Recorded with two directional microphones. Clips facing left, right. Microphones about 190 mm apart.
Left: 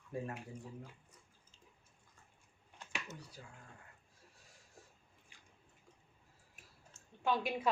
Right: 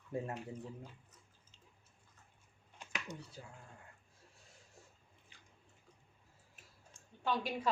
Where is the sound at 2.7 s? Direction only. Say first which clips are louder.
Right 1 dB; 20° right (ahead or behind).